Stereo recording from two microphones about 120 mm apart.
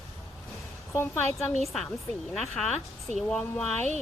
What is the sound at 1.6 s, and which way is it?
A woman's voice, 5° left (ahead or behind).